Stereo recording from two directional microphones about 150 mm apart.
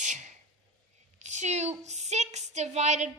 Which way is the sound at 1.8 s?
50° right (ahead or behind).